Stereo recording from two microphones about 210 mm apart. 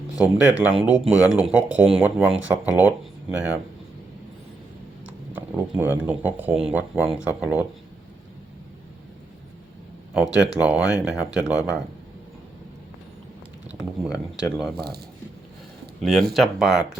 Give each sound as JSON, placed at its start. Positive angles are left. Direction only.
{"t": 0.2, "sound": "speech", "side_deg": -5}
{"t": 5.0, "sound": "speech", "side_deg": -5}
{"t": 10.2, "sound": "speech", "side_deg": -5}
{"t": 14.1, "sound": "speech", "side_deg": 15}
{"t": 14.8, "sound": "a man's voice", "side_deg": -50}
{"t": 16.0, "sound": "speech", "side_deg": 0}